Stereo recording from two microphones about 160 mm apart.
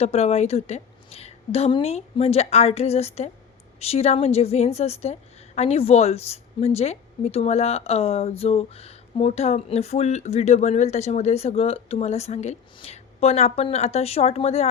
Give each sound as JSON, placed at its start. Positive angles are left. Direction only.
{"t": 0.0, "sound": "a woman's voice", "side_deg": 40}